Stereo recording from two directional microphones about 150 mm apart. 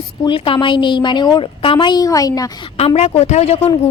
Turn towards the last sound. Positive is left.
turn(degrees=45)  # may be behind; listen again after turning